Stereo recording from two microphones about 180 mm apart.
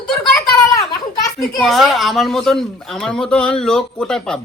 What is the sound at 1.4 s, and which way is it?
Speech, centre (ahead or behind).